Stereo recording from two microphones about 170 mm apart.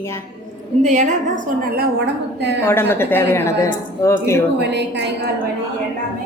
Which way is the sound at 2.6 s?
15° left (ahead or behind).